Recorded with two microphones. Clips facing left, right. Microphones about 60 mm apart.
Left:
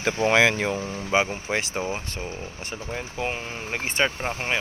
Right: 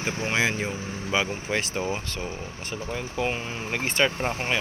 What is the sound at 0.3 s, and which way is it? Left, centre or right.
Speech, left.